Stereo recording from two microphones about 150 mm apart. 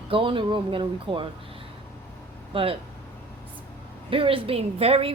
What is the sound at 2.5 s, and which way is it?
Speech, 35° right (ahead or behind).